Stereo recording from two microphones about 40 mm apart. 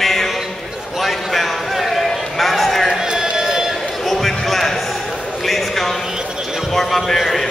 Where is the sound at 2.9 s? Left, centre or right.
Centre.